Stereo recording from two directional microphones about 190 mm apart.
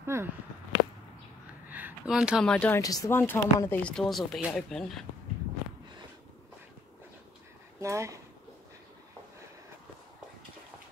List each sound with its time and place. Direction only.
0.0 s speech: 15° right (ahead or behind)
1.7 s speech: 10° right (ahead or behind)
2.8 s speech: 20° left (ahead or behind); by 5.0 s centre (ahead or behind)
7.8 s speech: 15° right (ahead or behind)